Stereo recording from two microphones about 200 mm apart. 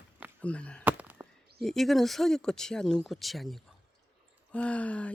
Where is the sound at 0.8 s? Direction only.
10° right (ahead or behind).